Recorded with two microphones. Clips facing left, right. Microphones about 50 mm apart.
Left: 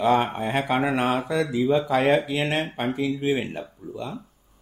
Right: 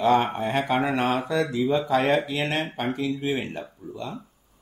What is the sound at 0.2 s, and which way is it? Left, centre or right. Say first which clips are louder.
Speech: even; centre.